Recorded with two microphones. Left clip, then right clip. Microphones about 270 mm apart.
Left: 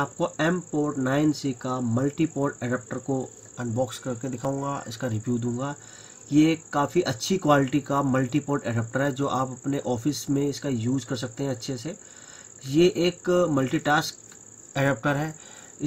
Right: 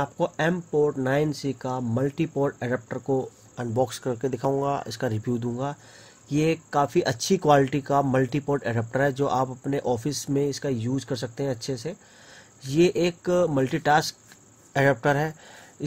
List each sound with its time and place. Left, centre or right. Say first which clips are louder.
0.0 s speech: even; right